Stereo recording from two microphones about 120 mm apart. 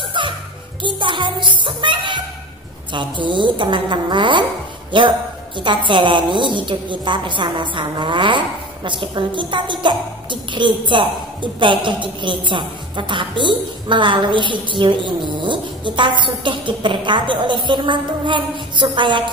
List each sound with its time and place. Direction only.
0.2 s music: 40° right (ahead or behind)
0.8 s a child's voice: 40° right (ahead or behind)